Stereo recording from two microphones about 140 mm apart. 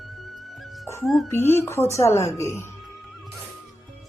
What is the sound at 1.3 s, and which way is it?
A woman's voice, 15° left (ahead or behind).